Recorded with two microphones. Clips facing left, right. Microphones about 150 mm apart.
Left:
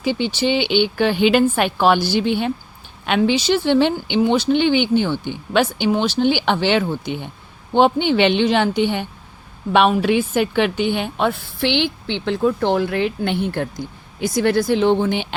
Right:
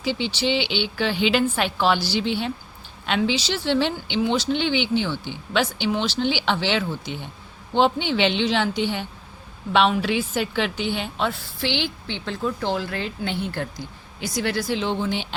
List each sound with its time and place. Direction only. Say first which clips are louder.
0.0 s a woman's voice: left 5 dB; 55° left (ahead or behind)